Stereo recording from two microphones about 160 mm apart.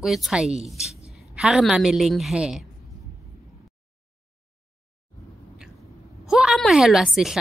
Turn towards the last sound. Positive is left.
turn(degrees=-5)  # may be behind; listen again after turning